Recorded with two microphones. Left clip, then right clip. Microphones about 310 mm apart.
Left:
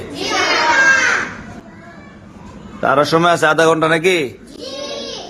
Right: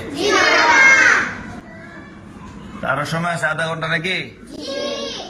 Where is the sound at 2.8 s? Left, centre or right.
Centre.